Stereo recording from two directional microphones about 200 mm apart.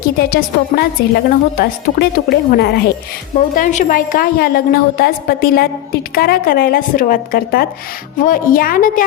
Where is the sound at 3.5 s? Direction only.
40° left (ahead or behind).